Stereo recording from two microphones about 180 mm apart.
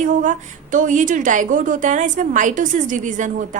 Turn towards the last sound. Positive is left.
turn(degrees=-45)  # may be behind; listen again after turning